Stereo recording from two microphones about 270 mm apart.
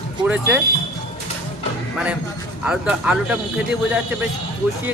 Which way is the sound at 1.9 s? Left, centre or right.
Centre.